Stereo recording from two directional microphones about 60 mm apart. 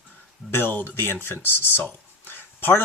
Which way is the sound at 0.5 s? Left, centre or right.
Left.